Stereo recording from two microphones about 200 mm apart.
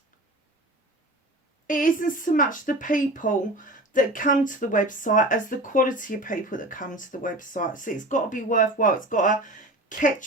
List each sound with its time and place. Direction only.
1.6 s speech: 40° left (ahead or behind)